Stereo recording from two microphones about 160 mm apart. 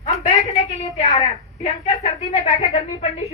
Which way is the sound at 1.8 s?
40° left (ahead or behind).